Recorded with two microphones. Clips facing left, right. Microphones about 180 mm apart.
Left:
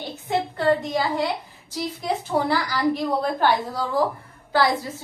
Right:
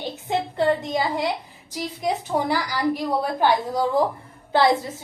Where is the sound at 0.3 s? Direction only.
20° right (ahead or behind).